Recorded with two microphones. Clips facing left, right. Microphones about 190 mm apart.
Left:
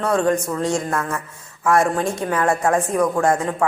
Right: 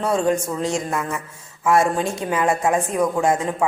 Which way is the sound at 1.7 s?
25° right (ahead or behind).